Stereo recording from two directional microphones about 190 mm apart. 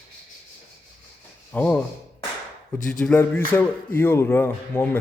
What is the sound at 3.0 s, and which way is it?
A man's voice, 10° left (ahead or behind).